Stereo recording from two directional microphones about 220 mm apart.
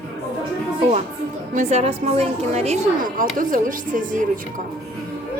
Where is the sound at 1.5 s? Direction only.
25° right (ahead or behind).